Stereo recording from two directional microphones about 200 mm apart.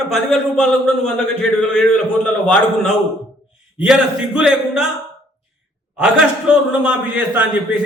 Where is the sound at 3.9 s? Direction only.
5° right (ahead or behind).